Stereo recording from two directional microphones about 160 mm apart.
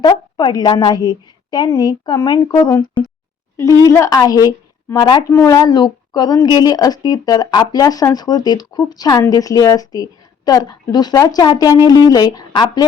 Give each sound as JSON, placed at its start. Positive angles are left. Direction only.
{"t": 0.0, "sound": "a woman's voice", "side_deg": 30}
{"t": 2.6, "sound": "a woman's voice", "side_deg": 15}